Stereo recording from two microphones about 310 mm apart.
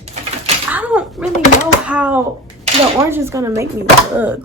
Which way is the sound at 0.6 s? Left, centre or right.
Centre.